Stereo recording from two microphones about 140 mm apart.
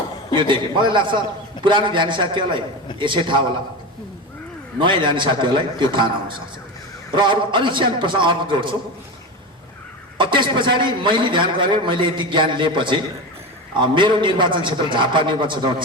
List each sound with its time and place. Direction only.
0.3 s a man's voice: 35° right (ahead or behind)
4.8 s a man's voice: 35° right (ahead or behind)
10.2 s a man's voice: 35° right (ahead or behind)